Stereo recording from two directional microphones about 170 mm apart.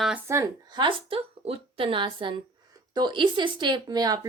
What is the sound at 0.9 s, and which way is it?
A woman's voice, 30° right (ahead or behind).